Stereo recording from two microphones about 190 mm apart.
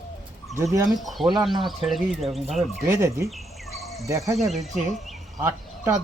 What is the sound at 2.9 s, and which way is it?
Speech, 15° right (ahead or behind).